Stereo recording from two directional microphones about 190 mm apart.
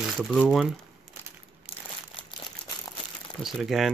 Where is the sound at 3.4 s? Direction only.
Centre (ahead or behind).